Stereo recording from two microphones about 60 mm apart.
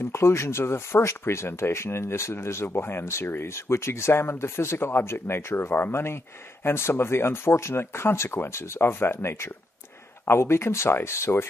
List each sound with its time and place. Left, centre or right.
0.0 s speech: left